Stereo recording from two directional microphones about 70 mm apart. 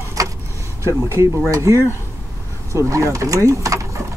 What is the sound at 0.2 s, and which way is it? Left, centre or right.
Vehicle, right.